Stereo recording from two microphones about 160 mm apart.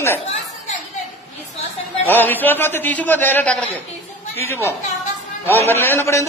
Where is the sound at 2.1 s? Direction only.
10° left (ahead or behind).